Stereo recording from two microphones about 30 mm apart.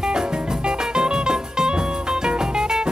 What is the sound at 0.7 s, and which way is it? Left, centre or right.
Music, right.